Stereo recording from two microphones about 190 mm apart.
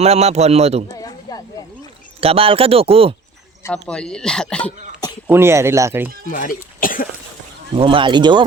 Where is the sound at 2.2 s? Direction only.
30° right (ahead or behind).